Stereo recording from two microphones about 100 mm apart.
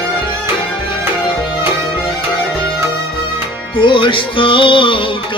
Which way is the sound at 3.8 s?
60° left (ahead or behind).